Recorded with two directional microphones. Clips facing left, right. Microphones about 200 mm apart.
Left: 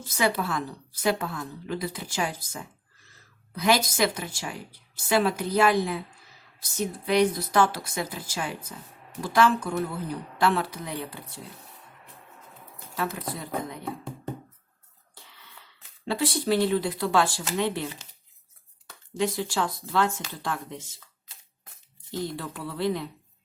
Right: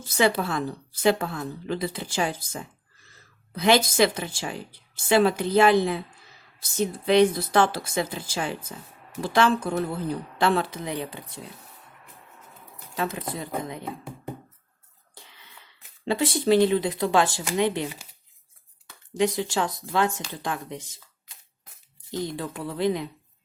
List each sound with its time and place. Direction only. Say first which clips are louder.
0.0 s a woman's voice: right 3 dB; 30° right (ahead or behind)
13.0 s a woman's voice: right 2 dB; 20° right (ahead or behind)
16.0 s a woman's voice: right 4 dB; 20° right (ahead or behind)
19.1 s a woman's voice: right 3 dB; 20° right (ahead or behind)
22.2 s speech: right 2 dB; 15° right (ahead or behind)